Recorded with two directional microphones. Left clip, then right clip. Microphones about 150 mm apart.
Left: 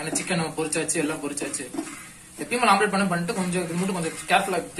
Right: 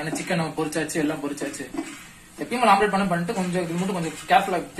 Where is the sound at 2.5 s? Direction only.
35° right (ahead or behind).